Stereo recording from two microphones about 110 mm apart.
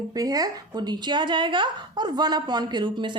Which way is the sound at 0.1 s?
35° right (ahead or behind).